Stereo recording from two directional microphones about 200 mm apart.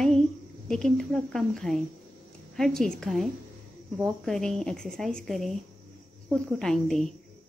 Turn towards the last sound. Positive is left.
turn(degrees=0)  # may be behind; listen again after turning